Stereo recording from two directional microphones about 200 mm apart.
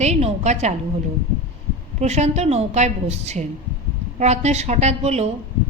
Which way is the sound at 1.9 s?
35° right (ahead or behind).